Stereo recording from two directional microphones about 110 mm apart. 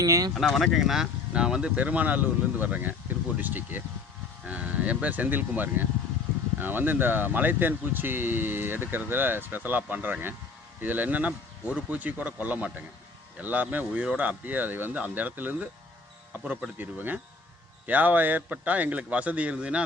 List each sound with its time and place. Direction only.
0.0 s speech: 30° right (ahead or behind)
0.3 s speech: centre (ahead or behind)